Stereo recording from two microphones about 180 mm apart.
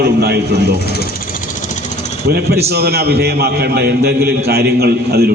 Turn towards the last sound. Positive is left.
turn(degrees=-60)  # may be behind; listen again after turning